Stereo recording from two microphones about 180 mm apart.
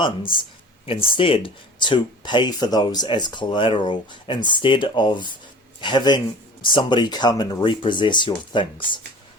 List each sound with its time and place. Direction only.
0.0 s speech: 25° left (ahead or behind)